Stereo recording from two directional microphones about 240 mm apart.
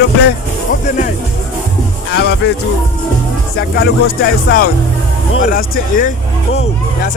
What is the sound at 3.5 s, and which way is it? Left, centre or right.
Speech, left.